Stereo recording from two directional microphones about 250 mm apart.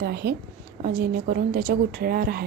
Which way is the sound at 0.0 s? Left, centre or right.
Right.